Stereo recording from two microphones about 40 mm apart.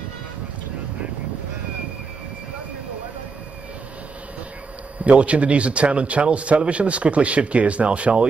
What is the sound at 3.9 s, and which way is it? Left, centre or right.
Speech, right.